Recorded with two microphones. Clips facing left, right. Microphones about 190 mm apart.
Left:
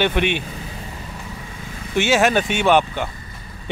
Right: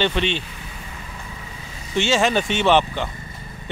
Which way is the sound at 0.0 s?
15° left (ahead or behind).